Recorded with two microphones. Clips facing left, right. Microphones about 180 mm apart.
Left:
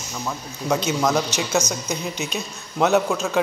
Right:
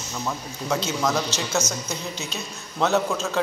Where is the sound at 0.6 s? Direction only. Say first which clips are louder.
Left 3 dB; 15° left (ahead or behind).